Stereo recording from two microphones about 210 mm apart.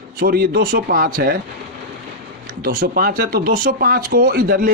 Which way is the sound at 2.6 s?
40° right (ahead or behind).